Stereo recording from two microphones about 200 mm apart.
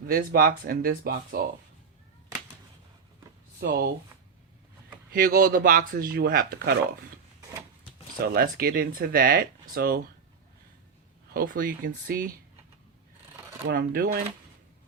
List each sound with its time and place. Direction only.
0.1 s speech: 45° right (ahead or behind)
3.6 s speech: 50° right (ahead or behind)
5.1 s speech: 45° right (ahead or behind)
8.2 s speech: 50° right (ahead or behind)
11.3 s speech: 45° right (ahead or behind)
13.7 s speech: 45° right (ahead or behind)